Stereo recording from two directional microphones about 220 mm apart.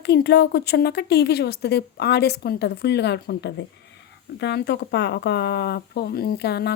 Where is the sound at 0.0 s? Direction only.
50° left (ahead or behind).